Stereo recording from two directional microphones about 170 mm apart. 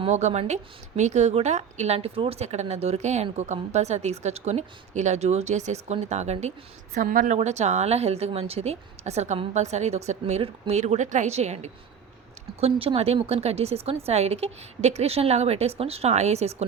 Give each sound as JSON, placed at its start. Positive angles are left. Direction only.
{"t": 0.0, "sound": "a woman's voice", "side_deg": -40}